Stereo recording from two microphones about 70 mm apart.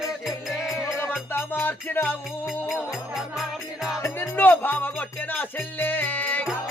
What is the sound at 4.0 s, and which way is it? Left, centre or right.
Music, left.